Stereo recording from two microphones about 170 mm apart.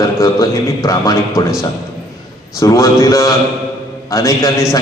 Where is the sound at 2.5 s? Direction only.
20° left (ahead or behind).